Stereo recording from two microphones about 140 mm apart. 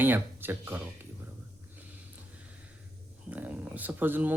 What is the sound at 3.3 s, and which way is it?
Speech, 10° right (ahead or behind).